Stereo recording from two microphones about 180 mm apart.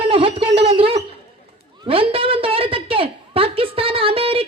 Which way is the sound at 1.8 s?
30° right (ahead or behind).